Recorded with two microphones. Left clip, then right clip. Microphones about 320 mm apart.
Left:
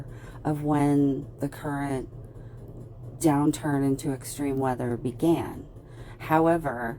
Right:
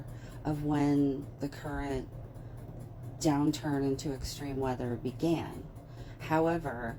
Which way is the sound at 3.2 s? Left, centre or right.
Left.